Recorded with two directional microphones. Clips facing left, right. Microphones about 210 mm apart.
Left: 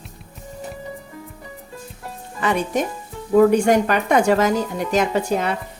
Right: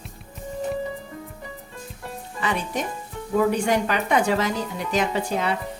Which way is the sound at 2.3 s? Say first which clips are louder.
Left 6 dB; 50° left (ahead or behind).